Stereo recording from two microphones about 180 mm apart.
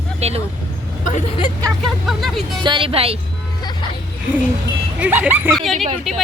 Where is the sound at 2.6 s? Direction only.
25° right (ahead or behind).